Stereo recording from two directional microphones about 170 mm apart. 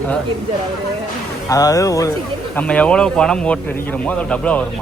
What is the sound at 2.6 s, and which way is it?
Speech, 5° left (ahead or behind).